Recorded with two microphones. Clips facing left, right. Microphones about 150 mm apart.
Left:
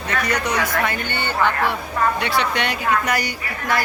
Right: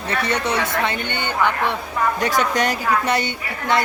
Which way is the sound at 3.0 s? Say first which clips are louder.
Right 2 dB; 25° right (ahead or behind).